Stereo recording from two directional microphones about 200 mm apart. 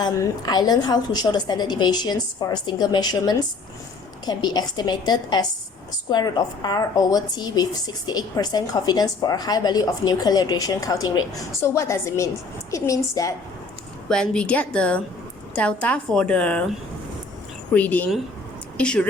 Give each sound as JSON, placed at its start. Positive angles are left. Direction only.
{"t": 0.0, "sound": "a woman's voice", "side_deg": 20}
{"t": 14.1, "sound": "a woman's voice", "side_deg": 5}
{"t": 17.7, "sound": "a woman's voice", "side_deg": 10}